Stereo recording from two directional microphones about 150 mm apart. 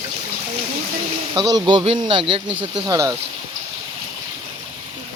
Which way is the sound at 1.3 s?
25° right (ahead or behind).